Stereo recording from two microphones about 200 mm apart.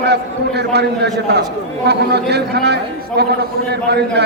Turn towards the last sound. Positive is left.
turn(degrees=-55)  # may be behind; listen again after turning